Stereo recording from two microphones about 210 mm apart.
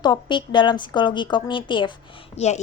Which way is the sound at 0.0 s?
20° left (ahead or behind).